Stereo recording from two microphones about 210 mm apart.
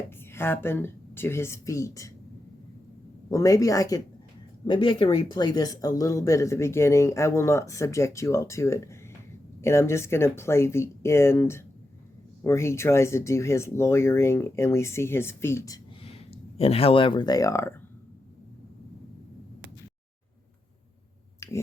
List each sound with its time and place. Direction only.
0.3 s speech: 10° left (ahead or behind)
3.2 s speech: 15° left (ahead or behind)
21.4 s a sound: 15° left (ahead or behind)